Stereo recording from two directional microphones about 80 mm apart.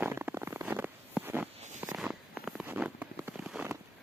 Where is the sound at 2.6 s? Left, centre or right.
Centre.